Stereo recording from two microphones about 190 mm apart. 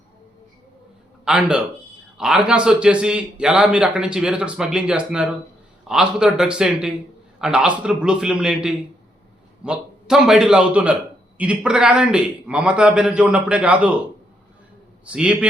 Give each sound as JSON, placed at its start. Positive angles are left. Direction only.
{"t": 1.2, "sound": "a man's voice", "side_deg": -5}
{"t": 15.0, "sound": "a man's voice", "side_deg": -5}